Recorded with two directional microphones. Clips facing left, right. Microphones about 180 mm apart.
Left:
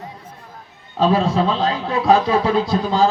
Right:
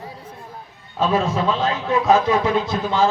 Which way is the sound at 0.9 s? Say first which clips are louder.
Left 3 dB; 35° left (ahead or behind).